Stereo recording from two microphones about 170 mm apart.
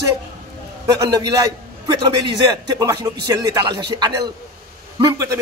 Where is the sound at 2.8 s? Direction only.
25° right (ahead or behind).